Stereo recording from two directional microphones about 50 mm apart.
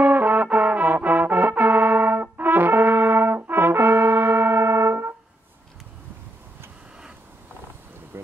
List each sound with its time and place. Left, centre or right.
0.0 s music: right